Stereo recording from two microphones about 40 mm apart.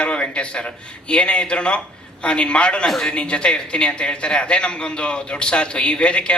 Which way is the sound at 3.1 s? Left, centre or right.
Left.